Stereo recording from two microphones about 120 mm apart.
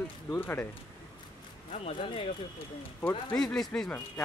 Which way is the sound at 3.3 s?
5° left (ahead or behind).